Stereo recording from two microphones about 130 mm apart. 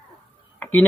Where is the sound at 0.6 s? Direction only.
15° left (ahead or behind).